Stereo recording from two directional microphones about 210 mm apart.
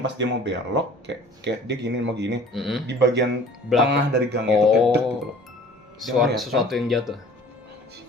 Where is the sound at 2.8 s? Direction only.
55° right (ahead or behind).